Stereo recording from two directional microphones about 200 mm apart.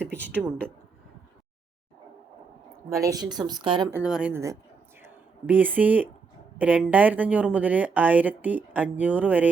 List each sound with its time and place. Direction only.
0.0 s a sound: 5° left (ahead or behind)
2.9 s speech: 15° right (ahead or behind)
3.9 s speech: 5° right (ahead or behind)